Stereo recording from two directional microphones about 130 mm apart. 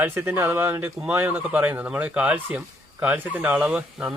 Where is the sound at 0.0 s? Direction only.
20° right (ahead or behind).